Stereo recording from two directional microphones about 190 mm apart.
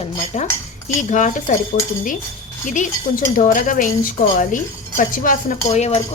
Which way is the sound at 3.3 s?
45° left (ahead or behind).